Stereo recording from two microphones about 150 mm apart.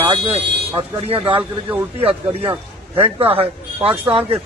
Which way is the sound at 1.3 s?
10° right (ahead or behind).